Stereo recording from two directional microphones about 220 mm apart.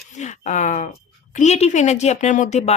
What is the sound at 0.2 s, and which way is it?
A woman's voice, 35° left (ahead or behind).